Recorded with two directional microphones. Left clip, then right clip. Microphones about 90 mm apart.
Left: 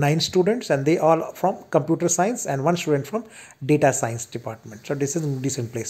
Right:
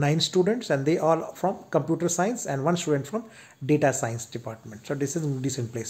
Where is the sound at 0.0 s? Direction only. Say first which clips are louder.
Left 3 dB; 25° left (ahead or behind).